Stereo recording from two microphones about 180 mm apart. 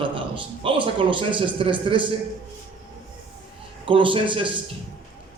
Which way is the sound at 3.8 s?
30° right (ahead or behind).